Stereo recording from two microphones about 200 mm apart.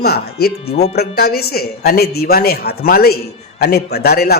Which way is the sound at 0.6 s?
30° left (ahead or behind).